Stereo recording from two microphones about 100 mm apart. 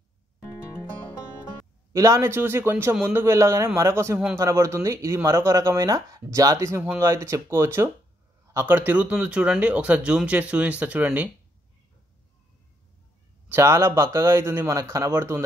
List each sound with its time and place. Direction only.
1.9 s a man's voice: 35° right (ahead or behind); by 11.2 s 15° right (ahead or behind)
13.5 s a man's voice: 30° right (ahead or behind)